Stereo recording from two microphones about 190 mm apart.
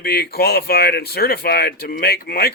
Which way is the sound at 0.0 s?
55° left (ahead or behind).